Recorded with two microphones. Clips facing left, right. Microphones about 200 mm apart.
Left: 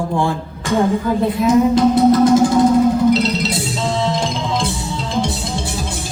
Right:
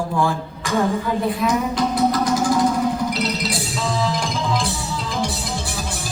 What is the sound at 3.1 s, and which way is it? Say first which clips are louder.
Music: left 7 dB; 25° left (ahead or behind).